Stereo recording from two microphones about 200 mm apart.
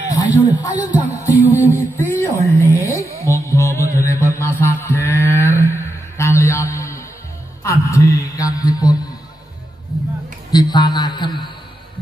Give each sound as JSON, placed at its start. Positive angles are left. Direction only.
{"t": 0.1, "sound": "speech", "side_deg": 15}
{"t": 0.7, "sound": "music", "side_deg": -35}
{"t": 2.0, "sound": "music", "side_deg": 10}
{"t": 3.9, "sound": "mantra", "side_deg": 15}
{"t": 5.6, "sound": "music", "side_deg": 15}
{"t": 7.6, "sound": "a sound", "side_deg": 15}
{"t": 10.5, "sound": "a sound", "side_deg": 20}